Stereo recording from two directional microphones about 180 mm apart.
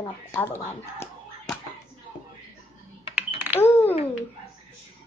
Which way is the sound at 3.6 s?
10° left (ahead or behind).